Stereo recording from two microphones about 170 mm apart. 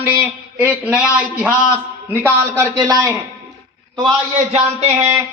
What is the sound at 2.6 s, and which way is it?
A man's voice, 15° right (ahead or behind).